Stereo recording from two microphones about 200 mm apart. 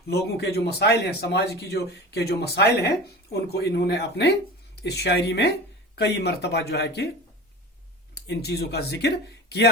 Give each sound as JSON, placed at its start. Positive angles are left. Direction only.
{"t": 0.1, "sound": "a man's voice", "side_deg": 55}
{"t": 8.1, "sound": "speech", "side_deg": 55}